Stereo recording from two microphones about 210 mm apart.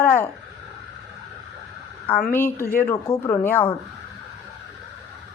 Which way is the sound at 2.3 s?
10° left (ahead or behind).